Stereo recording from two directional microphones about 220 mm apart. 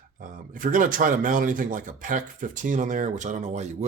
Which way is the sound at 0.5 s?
35° right (ahead or behind).